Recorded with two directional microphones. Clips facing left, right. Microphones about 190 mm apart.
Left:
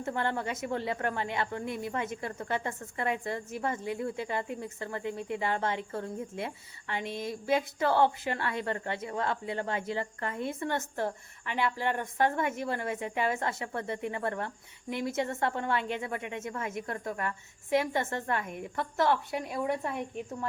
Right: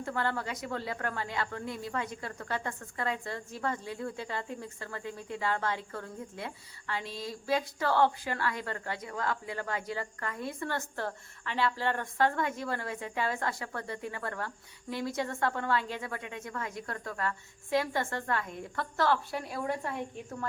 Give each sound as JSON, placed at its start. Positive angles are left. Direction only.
{"t": 0.0, "sound": "speech", "side_deg": 20}